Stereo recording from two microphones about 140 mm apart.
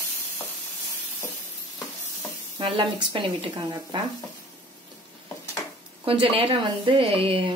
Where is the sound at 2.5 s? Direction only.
35° right (ahead or behind).